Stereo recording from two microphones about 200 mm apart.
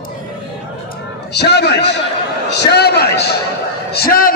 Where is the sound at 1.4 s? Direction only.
55° left (ahead or behind).